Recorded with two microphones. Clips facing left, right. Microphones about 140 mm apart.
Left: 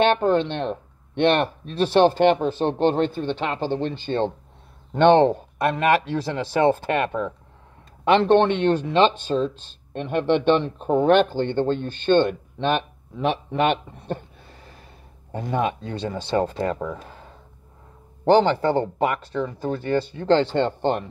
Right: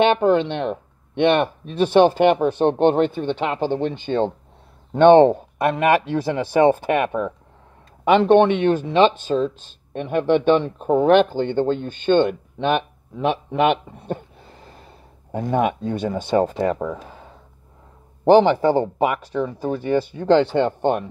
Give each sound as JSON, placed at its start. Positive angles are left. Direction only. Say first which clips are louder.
{"t": 0.0, "sound": "speech", "louder": "right 2 dB", "side_deg": -15}
{"t": 15.5, "sound": "speech", "louder": "right 4 dB", "side_deg": -15}